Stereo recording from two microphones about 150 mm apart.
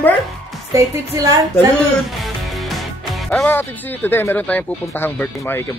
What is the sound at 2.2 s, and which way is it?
Music, centre (ahead or behind).